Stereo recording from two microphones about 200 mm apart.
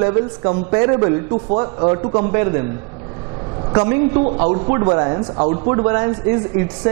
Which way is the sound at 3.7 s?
25° right (ahead or behind).